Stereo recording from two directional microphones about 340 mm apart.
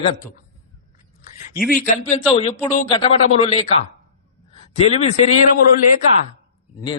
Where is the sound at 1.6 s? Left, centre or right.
Left.